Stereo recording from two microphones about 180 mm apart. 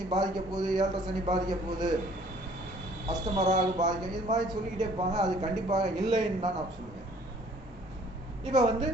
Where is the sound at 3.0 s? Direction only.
20° right (ahead or behind).